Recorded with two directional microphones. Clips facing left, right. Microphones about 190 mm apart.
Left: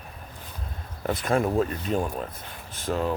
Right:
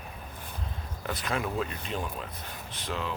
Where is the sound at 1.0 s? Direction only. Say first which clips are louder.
Left 8 dB; 50° left (ahead or behind).